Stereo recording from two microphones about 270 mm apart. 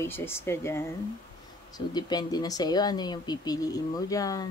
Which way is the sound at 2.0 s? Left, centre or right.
Centre.